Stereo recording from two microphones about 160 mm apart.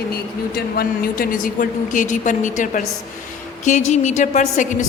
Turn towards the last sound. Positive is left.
turn(degrees=50)  # may be behind; listen again after turning